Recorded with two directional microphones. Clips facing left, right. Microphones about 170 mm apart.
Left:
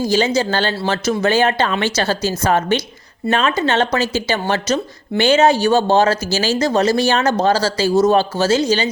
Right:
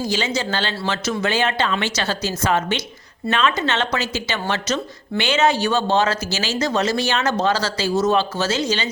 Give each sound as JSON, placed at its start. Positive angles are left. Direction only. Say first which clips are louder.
{"t": 0.1, "sound": "speech", "louder": "left 6 dB", "side_deg": 40}